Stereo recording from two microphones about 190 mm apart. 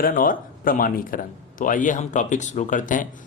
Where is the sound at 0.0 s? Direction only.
50° left (ahead or behind).